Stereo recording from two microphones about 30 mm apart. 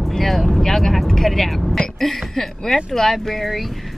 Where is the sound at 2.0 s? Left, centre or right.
Centre.